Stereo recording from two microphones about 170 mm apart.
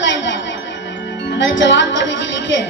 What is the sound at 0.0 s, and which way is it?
Music, 90° left.